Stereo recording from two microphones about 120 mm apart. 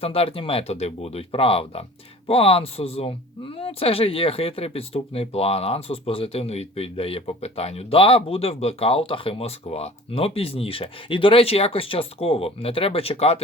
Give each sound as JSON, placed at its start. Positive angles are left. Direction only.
{"t": 0.0, "sound": "speech", "side_deg": 55}